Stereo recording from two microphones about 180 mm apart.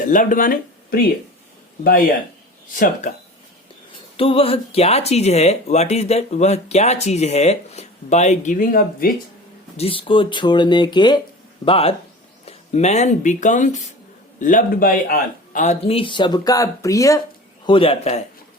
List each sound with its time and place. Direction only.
0.0 s speech: 45° left (ahead or behind)
4.2 s speech: 30° left (ahead or behind); by 9.1 s 50° left (ahead or behind)
9.7 s speech: 30° left (ahead or behind)
17.7 s speech: 30° left (ahead or behind)